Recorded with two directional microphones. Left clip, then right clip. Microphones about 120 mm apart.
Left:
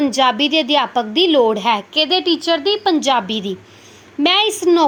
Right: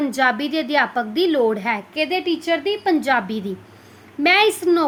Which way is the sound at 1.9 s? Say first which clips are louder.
Left 6 dB; 20° right (ahead or behind).